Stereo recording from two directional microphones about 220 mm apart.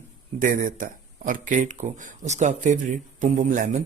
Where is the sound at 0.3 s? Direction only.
35° right (ahead or behind).